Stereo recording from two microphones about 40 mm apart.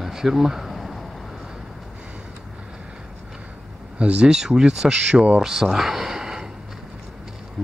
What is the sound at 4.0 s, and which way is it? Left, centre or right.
Speech, right.